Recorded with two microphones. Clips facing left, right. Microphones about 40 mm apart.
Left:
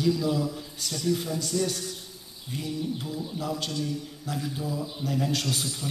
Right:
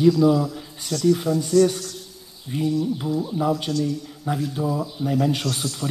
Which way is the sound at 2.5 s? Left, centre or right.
Centre.